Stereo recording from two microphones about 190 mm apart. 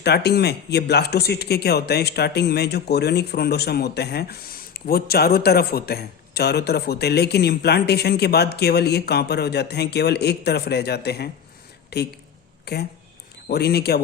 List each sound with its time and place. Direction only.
0.0 s speech: 60° left (ahead or behind)